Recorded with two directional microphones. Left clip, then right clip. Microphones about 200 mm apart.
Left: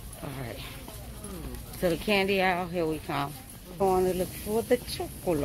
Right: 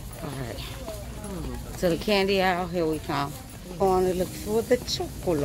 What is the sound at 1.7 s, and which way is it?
Speech, 15° left (ahead or behind).